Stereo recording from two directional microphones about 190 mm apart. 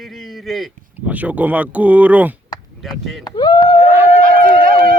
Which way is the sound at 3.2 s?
25° left (ahead or behind).